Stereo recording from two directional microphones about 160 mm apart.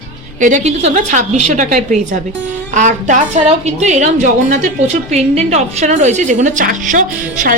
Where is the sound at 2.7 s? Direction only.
50° right (ahead or behind).